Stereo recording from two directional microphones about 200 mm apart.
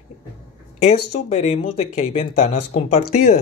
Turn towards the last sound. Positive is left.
turn(degrees=30)  # may be behind; listen again after turning